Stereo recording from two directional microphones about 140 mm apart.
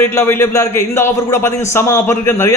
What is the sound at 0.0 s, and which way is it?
A man's voice, 15° left (ahead or behind).